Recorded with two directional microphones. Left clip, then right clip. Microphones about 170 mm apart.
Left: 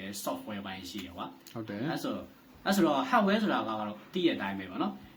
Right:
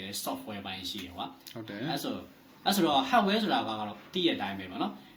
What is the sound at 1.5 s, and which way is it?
Speech, 30° left (ahead or behind).